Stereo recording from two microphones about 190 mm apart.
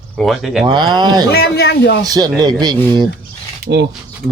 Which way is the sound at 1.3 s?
55° left (ahead or behind).